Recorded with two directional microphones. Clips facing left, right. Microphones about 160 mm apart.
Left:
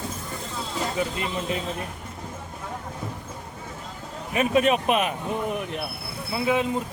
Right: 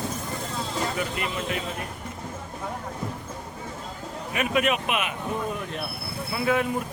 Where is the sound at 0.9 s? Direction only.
25° left (ahead or behind).